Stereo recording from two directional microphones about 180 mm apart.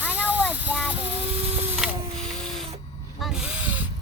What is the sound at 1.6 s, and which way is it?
Printer, 5° right (ahead or behind).